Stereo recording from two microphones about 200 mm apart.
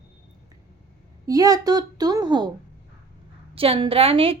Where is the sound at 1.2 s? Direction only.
15° right (ahead or behind).